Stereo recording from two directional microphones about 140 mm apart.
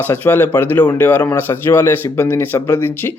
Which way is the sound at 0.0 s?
15° left (ahead or behind).